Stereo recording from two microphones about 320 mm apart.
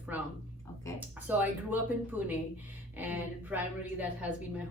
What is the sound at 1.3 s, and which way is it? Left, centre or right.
Speech, centre.